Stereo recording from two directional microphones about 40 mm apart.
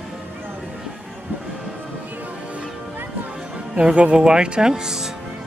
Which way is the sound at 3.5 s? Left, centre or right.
Right.